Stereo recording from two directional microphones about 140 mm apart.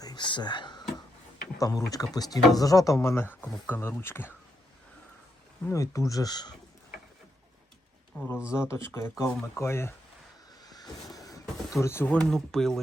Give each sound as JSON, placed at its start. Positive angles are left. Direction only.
{"t": 0.0, "sound": "whispering", "side_deg": 30}
{"t": 1.5, "sound": "speech", "side_deg": 25}
{"t": 5.6, "sound": "speech", "side_deg": 20}
{"t": 8.1, "sound": "speech", "side_deg": 10}
{"t": 10.6, "sound": "vehicle", "side_deg": 25}
{"t": 11.7, "sound": "speech", "side_deg": 20}